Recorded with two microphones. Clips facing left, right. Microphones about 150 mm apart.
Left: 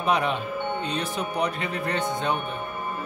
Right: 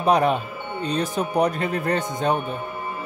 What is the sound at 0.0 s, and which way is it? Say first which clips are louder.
Speech: right 5 dB; 40° right (ahead or behind).